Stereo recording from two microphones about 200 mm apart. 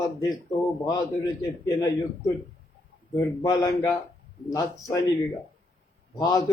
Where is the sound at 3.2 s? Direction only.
15° left (ahead or behind).